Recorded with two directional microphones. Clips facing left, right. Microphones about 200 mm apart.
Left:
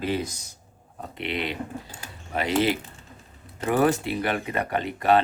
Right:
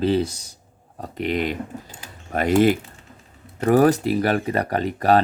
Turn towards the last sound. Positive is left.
turn(degrees=-40)  # may be behind; listen again after turning